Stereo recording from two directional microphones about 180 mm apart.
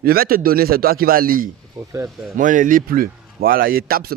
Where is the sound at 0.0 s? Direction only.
55° right (ahead or behind).